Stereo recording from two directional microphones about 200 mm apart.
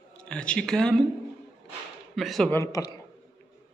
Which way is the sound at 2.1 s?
Centre (ahead or behind).